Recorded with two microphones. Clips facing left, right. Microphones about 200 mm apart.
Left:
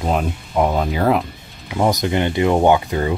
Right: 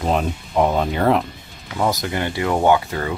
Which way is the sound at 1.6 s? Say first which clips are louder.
Left 3 dB; 20° left (ahead or behind).